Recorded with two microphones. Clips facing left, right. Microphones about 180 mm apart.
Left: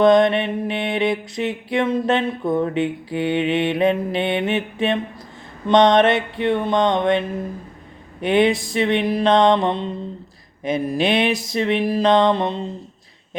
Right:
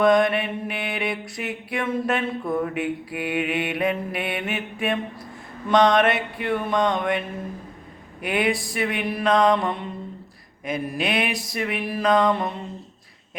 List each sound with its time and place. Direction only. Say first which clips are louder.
0.0 s mantra: left 4 dB; 20° left (ahead or behind)